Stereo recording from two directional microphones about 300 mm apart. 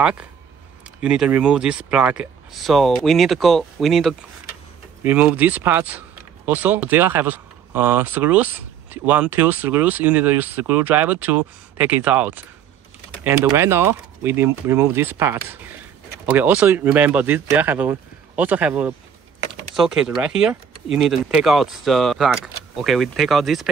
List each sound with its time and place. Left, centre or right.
0.0 s speech: centre